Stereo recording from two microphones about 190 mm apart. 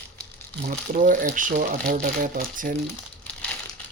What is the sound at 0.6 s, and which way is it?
Speech, 40° right (ahead or behind).